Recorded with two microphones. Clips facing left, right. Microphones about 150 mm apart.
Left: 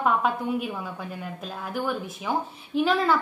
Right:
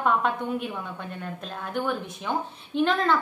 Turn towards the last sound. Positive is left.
turn(degrees=5)  # may be behind; listen again after turning